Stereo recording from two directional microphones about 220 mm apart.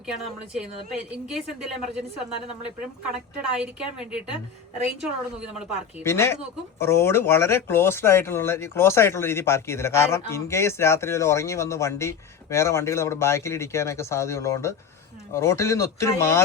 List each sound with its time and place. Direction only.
1.1 s a woman's voice: 5° right (ahead or behind)
3.4 s a woman's voice: 5° right (ahead or behind)
6.0 s speech: 10° left (ahead or behind)